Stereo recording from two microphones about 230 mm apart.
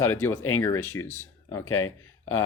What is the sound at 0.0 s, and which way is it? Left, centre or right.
Speech, centre.